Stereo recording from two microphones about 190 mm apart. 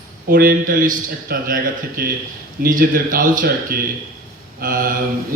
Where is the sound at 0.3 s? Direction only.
50° right (ahead or behind).